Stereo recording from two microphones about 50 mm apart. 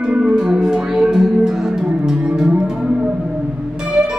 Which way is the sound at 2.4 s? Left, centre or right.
Centre.